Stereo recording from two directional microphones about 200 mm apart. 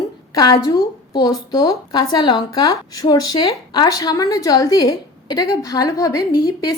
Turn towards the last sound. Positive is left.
turn(degrees=15)  # may be behind; listen again after turning